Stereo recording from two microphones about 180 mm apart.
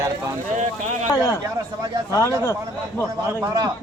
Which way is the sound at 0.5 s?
40° right (ahead or behind).